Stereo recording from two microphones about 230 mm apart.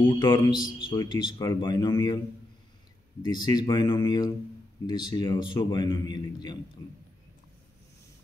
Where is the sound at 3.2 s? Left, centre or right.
Centre.